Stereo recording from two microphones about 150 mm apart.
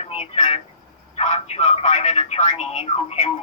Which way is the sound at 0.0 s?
45° left (ahead or behind).